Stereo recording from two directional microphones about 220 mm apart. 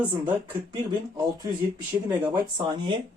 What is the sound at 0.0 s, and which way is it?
Speech, 10° right (ahead or behind).